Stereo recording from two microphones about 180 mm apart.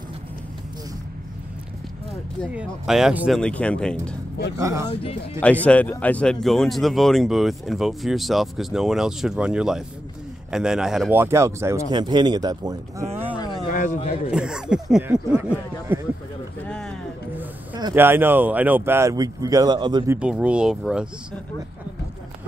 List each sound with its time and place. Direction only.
2.5 s speech: 5° right (ahead or behind)
4.6 s speech: 15° right (ahead or behind)
5.4 s speech: 10° left (ahead or behind); by 13.1 s 20° right (ahead or behind)
13.7 s speech: 45° left (ahead or behind)
14.3 s speech: 5° right (ahead or behind)
16.6 s music: 5° left (ahead or behind)
17.9 s speech: 10° right (ahead or behind)
20.2 s speech: 5° right (ahead or behind)